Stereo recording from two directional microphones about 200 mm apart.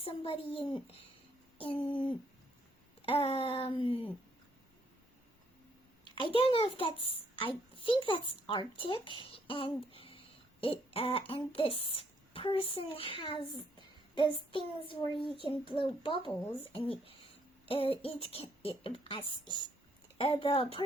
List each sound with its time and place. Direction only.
0.0 s a child's voice: 30° left (ahead or behind)
6.1 s a child's voice: 25° left (ahead or behind)
14.2 s child singing: 25° left (ahead or behind)
14.8 s a child's voice: 25° left (ahead or behind)
17.7 s a child's voice: 25° left (ahead or behind)